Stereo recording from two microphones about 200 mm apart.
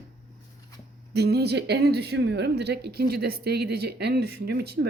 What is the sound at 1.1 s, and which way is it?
Speech, 55° right (ahead or behind).